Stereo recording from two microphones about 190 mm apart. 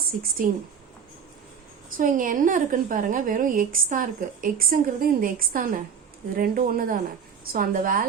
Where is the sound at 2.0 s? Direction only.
45° right (ahead or behind).